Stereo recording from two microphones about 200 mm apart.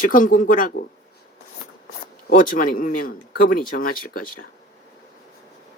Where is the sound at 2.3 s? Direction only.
40° left (ahead or behind).